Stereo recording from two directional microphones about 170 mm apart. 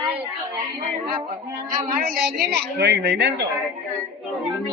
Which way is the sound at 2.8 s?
80° right.